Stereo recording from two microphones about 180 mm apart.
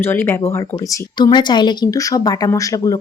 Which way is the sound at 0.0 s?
15° left (ahead or behind).